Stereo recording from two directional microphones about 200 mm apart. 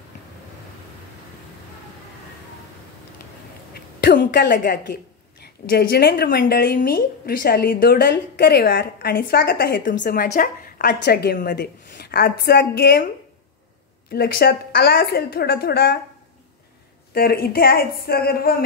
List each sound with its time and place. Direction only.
3.7 s a sound: 55° left (ahead or behind)
5.4 s speech: 50° left (ahead or behind)
14.1 s speech: 50° left (ahead or behind)
17.1 s speech: 50° left (ahead or behind)